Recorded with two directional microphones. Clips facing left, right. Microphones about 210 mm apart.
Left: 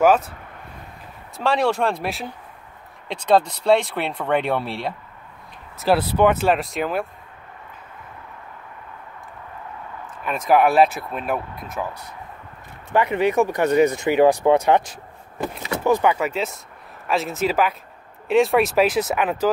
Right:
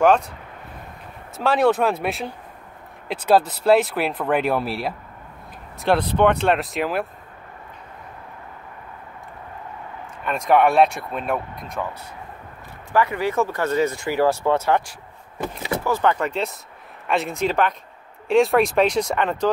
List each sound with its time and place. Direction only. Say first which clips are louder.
0.0 s speech: even; 5° left (ahead or behind)
1.3 s speech: right 2 dB; centre (ahead or behind)
5.8 s speech: left 1 dB; 5° left (ahead or behind)
10.2 s speech: even; centre (ahead or behind)
12.9 s speech: left 2 dB; 20° left (ahead or behind); by 19.5 s 5° left (ahead or behind)